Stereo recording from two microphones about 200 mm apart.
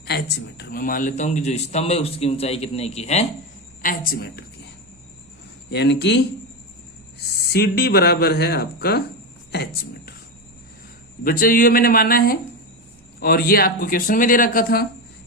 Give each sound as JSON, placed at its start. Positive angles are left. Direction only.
{"t": 0.0, "sound": "a man's voice", "side_deg": 55}
{"t": 3.8, "sound": "speech", "side_deg": 45}
{"t": 5.7, "sound": "speech", "side_deg": 55}
{"t": 11.2, "sound": "speech", "side_deg": 45}